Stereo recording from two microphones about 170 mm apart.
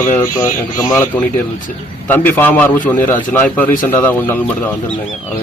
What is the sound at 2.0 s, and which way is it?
Speech, 10° left (ahead or behind).